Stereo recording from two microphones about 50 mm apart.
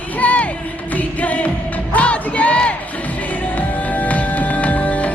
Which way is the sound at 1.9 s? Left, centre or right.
Left.